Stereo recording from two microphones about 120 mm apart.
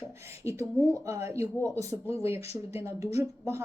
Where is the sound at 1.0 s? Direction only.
25° right (ahead or behind).